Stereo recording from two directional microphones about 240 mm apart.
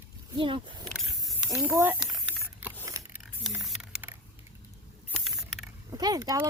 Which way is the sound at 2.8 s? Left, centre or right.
Centre.